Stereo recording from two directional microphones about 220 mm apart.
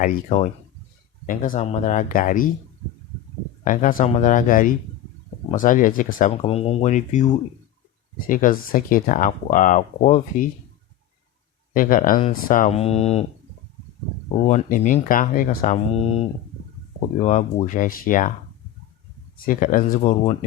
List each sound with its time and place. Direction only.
0.0 s speech: 30° left (ahead or behind)
3.6 s speech: 35° left (ahead or behind)
6.3 s speech: 25° left (ahead or behind)
8.3 s speech: 40° left (ahead or behind)
11.7 s speech: 40° left (ahead or behind)
14.4 s speech: 35° left (ahead or behind)
19.5 s speech: 40° left (ahead or behind)